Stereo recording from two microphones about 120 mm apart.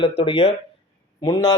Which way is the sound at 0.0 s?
45° left (ahead or behind).